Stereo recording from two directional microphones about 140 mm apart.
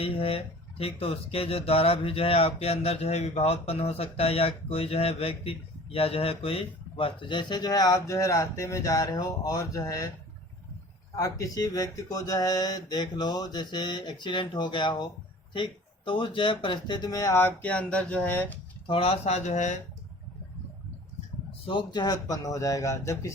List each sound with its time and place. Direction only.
0.0 s speech: 45° left (ahead or behind); by 10.1 s 20° left (ahead or behind)
11.2 s speech: 25° left (ahead or behind)
18.9 s speech: 45° left (ahead or behind)
21.7 s speech: 35° left (ahead or behind)